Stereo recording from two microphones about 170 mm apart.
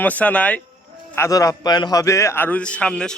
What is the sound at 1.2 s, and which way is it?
A man's voice, 20° left (ahead or behind).